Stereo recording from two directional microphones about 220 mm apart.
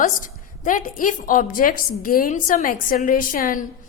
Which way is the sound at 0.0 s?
35° left (ahead or behind).